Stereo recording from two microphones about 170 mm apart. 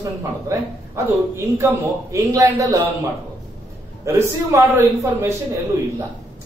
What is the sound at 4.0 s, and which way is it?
A man's voice, 15° right (ahead or behind).